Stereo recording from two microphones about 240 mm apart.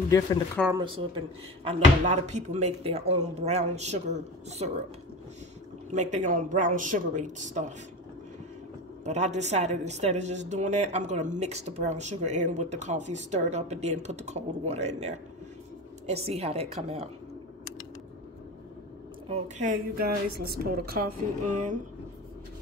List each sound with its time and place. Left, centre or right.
0.7 s speech: right
5.9 s speech: right
9.0 s speech: right
16.3 s speech: right
19.2 s speech: right